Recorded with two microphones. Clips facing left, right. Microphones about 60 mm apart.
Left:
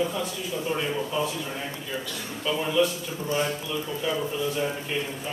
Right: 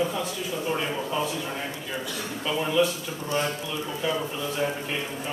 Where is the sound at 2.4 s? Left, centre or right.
Centre.